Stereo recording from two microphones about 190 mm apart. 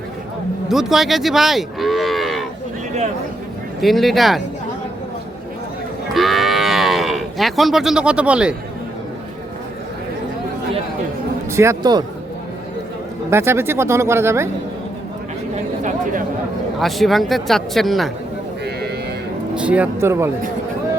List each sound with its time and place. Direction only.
0.7 s moo: centre (ahead or behind)
3.8 s speech: centre (ahead or behind)
6.1 s cattle: centre (ahead or behind)
11.5 s a man's voice: 15° right (ahead or behind)
13.3 s speech: 10° right (ahead or behind)
15.5 s speech: 40° right (ahead or behind)
16.8 s speech: centre (ahead or behind)
19.5 s speech: 5° right (ahead or behind)